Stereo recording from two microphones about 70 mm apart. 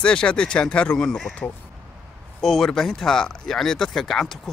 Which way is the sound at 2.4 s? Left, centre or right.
Centre.